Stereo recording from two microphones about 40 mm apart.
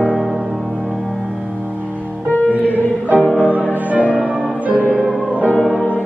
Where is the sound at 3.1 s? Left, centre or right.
Left.